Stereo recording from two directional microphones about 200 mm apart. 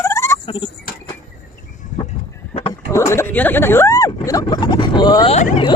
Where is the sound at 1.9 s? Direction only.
40° left (ahead or behind).